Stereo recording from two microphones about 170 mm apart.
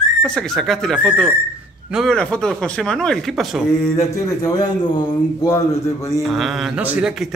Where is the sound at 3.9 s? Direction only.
20° left (ahead or behind).